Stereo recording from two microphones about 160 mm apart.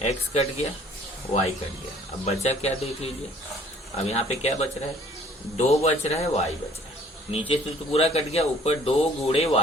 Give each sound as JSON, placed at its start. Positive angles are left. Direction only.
{"t": 0.0, "sound": "speech", "side_deg": 40}
{"t": 2.2, "sound": "speech", "side_deg": 45}